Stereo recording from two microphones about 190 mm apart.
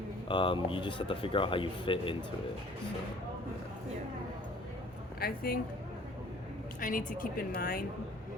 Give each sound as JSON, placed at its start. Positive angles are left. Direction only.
{"t": 0.3, "sound": "speech", "side_deg": 25}
{"t": 5.2, "sound": "a woman's voice", "side_deg": 50}
{"t": 6.7, "sound": "a woman's voice", "side_deg": 45}